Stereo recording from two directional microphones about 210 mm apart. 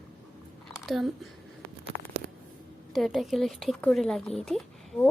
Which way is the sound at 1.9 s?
65° left (ahead or behind).